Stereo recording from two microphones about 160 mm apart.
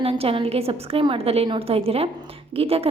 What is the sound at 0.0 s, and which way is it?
A woman's voice, 35° right (ahead or behind).